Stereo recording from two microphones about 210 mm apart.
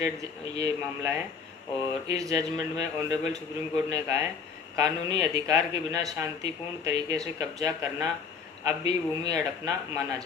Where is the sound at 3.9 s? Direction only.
15° right (ahead or behind).